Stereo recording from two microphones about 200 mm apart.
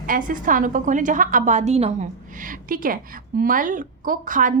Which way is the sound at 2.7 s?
45° right (ahead or behind).